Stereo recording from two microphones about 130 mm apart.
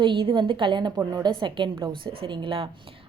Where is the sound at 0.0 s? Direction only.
40° right (ahead or behind).